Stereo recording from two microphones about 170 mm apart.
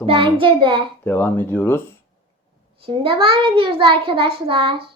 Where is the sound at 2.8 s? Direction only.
30° right (ahead or behind).